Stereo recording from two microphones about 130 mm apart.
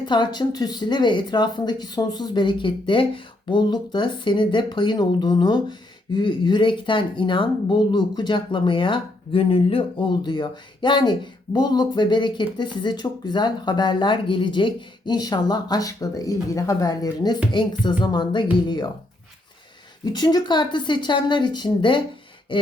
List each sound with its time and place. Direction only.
0.0 s speech: 35° left (ahead or behind)
20.1 s speech: 30° left (ahead or behind)
22.5 s a sound: 40° left (ahead or behind)